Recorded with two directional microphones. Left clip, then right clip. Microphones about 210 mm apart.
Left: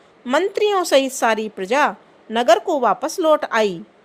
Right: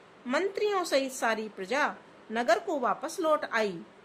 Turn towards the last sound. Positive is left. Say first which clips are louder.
# left 11 dB
turn(degrees=35)  # may be behind; listen again after turning